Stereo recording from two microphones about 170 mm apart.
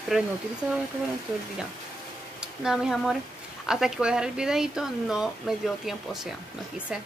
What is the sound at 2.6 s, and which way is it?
Speech, 5° right (ahead or behind).